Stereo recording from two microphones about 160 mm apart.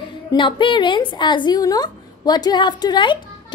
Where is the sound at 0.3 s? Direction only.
30° left (ahead or behind).